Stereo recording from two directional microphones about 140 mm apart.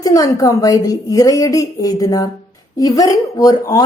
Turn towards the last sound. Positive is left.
turn(degrees=25)  # may be behind; listen again after turning